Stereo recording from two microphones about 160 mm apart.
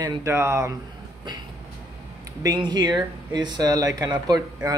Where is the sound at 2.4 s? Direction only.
25° right (ahead or behind).